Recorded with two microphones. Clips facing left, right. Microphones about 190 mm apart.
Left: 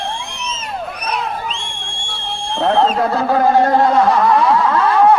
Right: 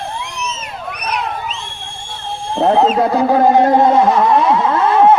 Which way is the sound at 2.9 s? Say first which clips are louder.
Right 3 dB; 20° right (ahead or behind).